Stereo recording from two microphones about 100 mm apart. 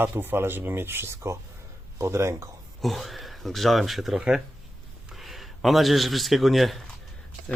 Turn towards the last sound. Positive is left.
turn(degrees=0)  # may be behind; listen again after turning